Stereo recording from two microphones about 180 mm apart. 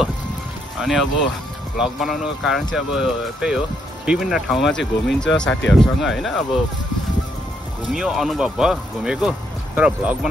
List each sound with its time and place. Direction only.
0.7 s speech: centre (ahead or behind)
7.9 s speech: 5° right (ahead or behind)